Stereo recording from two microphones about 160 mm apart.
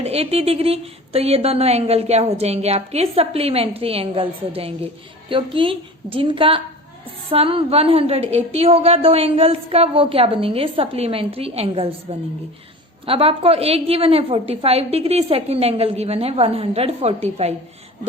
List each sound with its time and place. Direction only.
0.0 s speech: 40° right (ahead or behind)
13.1 s speech: 35° right (ahead or behind)